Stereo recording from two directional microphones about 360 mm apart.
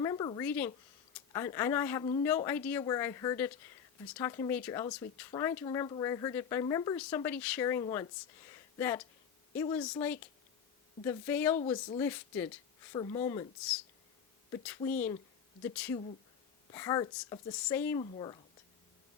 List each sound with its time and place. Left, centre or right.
0.0 s a sound: centre
1.3 s speech: centre
11.5 s speech: centre
11.9 s speech: centre